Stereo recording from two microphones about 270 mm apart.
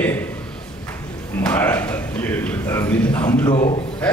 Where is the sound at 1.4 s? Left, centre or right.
Centre.